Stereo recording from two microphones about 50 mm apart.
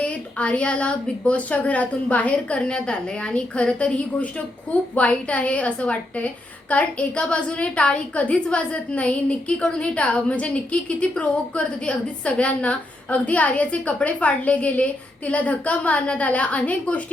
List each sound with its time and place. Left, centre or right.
0.0 s a woman's voice: left